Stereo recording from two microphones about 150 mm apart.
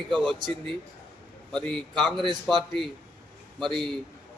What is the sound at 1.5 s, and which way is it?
Speech, 5° left (ahead or behind).